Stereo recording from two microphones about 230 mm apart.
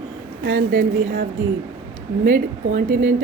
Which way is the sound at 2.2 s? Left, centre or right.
Right.